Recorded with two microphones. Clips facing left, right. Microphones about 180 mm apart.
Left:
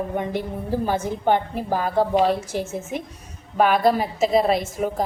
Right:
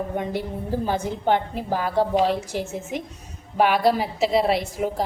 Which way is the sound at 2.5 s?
15° right (ahead or behind).